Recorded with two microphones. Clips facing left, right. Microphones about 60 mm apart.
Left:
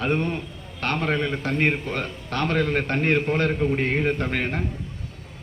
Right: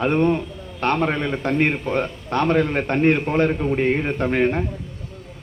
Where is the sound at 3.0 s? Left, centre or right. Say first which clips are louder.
Right 6 dB; centre.